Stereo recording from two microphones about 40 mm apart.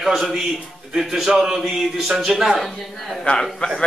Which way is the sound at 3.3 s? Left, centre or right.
Left.